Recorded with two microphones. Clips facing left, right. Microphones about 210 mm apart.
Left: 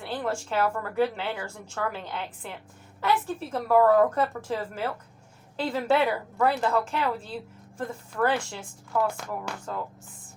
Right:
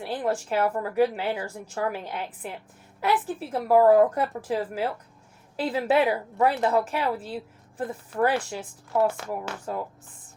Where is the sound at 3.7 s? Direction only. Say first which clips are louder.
Right 2 dB; 15° right (ahead or behind).